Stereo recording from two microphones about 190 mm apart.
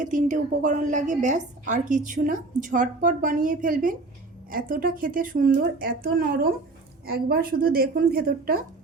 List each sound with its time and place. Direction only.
0.0 s a woman's voice: 40° right (ahead or behind)